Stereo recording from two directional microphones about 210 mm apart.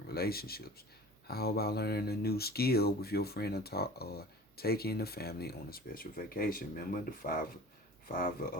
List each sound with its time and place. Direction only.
0.1 s speech: 45° left (ahead or behind)